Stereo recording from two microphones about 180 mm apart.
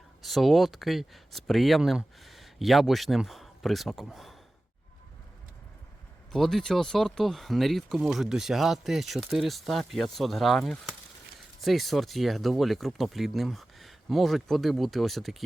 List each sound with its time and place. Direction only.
0.2 s speech: centre (ahead or behind)
6.3 s speech: centre (ahead or behind)